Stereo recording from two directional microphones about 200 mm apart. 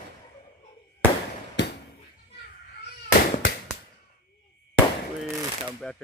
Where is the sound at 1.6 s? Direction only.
60° left (ahead or behind).